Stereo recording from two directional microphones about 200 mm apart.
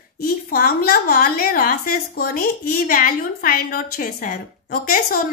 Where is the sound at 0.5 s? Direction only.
45° left (ahead or behind).